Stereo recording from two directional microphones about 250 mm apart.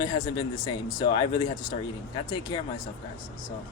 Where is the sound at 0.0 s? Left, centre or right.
Centre.